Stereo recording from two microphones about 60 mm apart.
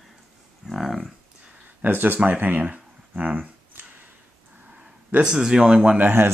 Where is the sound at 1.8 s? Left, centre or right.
Right.